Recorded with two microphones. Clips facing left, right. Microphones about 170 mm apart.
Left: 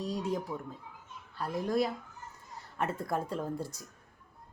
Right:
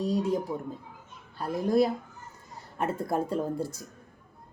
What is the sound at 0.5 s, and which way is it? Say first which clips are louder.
Speech: right 5 dB; 25° right (ahead or behind).